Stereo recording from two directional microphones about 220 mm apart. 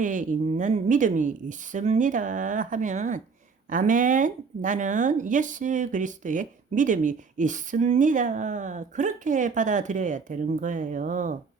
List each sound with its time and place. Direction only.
0.0 s speech: 35° right (ahead or behind)